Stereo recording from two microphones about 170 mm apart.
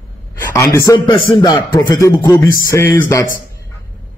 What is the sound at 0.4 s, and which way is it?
A man's voice, 20° left (ahead or behind).